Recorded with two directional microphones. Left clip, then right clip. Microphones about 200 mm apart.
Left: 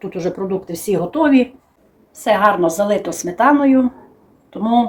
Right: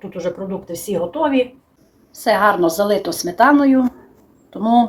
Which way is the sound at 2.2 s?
10° right (ahead or behind).